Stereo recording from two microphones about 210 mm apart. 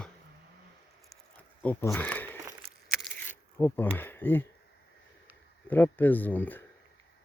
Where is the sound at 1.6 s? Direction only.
5° left (ahead or behind).